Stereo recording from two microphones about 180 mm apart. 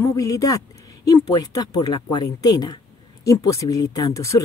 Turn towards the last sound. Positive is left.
turn(degrees=15)  # may be behind; listen again after turning